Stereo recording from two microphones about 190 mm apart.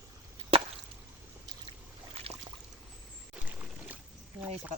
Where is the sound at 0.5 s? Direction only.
30° right (ahead or behind).